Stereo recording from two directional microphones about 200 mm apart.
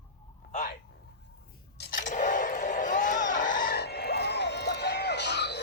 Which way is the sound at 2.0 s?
40° left (ahead or behind).